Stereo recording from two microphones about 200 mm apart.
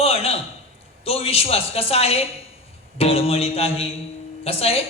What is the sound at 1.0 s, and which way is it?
A man's voice, 30° left (ahead or behind).